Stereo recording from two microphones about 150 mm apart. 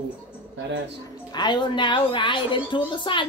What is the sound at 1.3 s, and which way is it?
A woman's voice, 30° left (ahead or behind).